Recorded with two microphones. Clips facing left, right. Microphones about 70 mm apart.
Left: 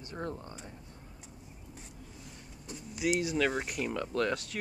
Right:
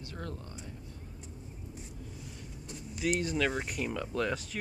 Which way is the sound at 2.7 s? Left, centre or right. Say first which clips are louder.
Left 1 dB; centre.